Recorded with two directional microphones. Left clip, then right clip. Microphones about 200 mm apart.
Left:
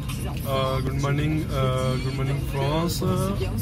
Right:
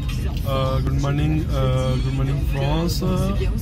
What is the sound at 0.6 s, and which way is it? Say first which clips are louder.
Music: right 1 dB; 20° right (ahead or behind).